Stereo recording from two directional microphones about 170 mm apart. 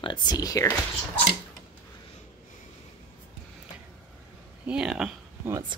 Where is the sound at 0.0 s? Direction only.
25° left (ahead or behind).